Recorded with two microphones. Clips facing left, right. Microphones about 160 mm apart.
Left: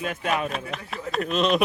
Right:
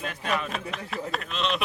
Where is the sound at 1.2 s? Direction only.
45° left (ahead or behind).